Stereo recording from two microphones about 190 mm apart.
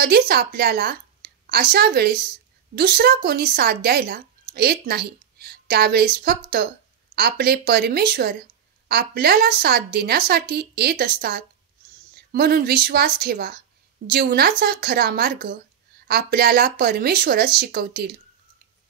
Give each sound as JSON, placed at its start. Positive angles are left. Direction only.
{"t": 0.0, "sound": "a woman's voice", "side_deg": -55}